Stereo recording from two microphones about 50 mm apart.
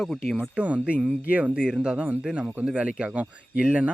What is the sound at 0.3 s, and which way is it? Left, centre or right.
Speech, right.